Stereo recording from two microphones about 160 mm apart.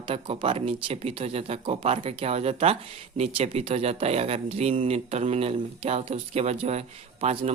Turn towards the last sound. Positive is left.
turn(degrees=-40)  # may be behind; listen again after turning